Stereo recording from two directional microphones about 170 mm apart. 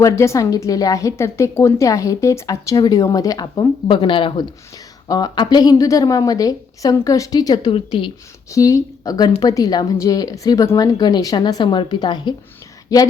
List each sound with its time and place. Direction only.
0.0 s a woman's voice: 20° left (ahead or behind)
8.4 s a woman's voice: 20° left (ahead or behind)